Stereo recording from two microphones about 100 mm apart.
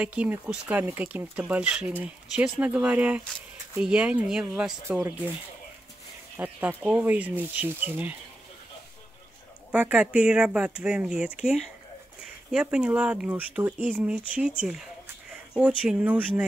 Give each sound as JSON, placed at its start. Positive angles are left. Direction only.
{"t": 0.0, "sound": "speech", "side_deg": -15}
{"t": 4.8, "sound": "speech", "side_deg": -25}
{"t": 6.3, "sound": "speech", "side_deg": -20}
{"t": 9.7, "sound": "speech", "side_deg": -15}